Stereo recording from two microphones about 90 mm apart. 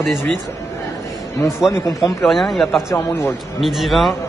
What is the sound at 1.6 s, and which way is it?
Speech, 35° left (ahead or behind).